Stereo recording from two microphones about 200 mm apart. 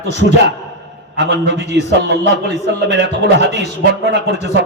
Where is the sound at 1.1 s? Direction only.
60° right (ahead or behind).